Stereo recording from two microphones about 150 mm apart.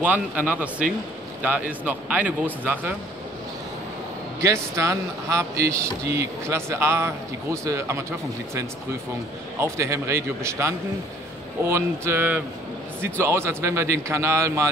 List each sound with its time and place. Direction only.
0.0 s a man's voice: 10° right (ahead or behind)
4.4 s speech: 20° right (ahead or behind)
9.6 s a man's voice: 20° right (ahead or behind)